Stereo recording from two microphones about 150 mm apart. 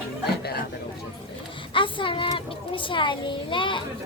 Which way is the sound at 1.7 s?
35° left (ahead or behind).